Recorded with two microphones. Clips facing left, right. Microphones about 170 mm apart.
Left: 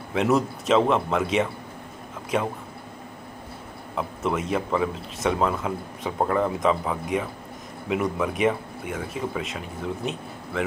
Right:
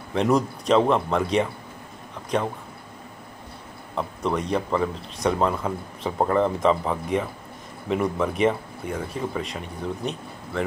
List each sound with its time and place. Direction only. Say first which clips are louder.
0.1 s speech: right 1 dB; 5° left (ahead or behind)
3.9 s speech: right 1 dB; 5° left (ahead or behind)